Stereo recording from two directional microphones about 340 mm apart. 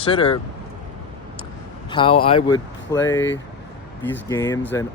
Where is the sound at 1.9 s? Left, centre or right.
Centre.